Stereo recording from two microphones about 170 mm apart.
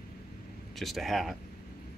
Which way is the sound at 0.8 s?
Centre (ahead or behind).